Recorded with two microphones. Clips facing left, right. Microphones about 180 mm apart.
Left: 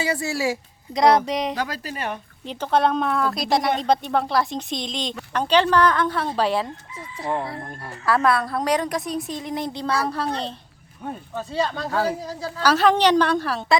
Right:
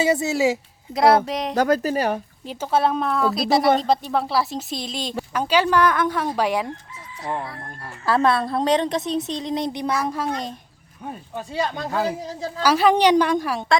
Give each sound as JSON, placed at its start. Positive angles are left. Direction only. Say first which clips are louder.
{"t": 0.0, "sound": "a woman's voice", "louder": "right 5 dB", "side_deg": -20}
{"t": 0.9, "sound": "speech", "louder": "right 1 dB", "side_deg": -5}
{"t": 1.5, "sound": "speech", "louder": "right 10 dB", "side_deg": -45}
{"t": 2.5, "sound": "speech", "louder": "even", "side_deg": -5}
{"t": 8.0, "sound": "a woman's voice", "louder": "right 1 dB", "side_deg": -25}